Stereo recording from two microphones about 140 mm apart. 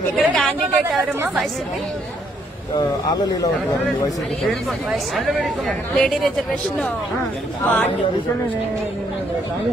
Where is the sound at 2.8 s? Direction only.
30° left (ahead or behind).